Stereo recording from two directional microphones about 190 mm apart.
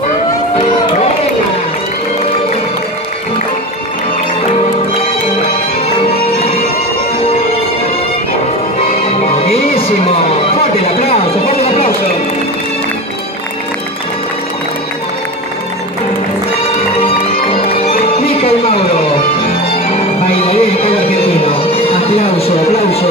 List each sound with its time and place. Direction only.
9.0 s music: 30° left (ahead or behind)
9.8 s a sound: 30° left (ahead or behind)
17.0 s music: 30° left (ahead or behind)
20.4 s music: 30° left (ahead or behind)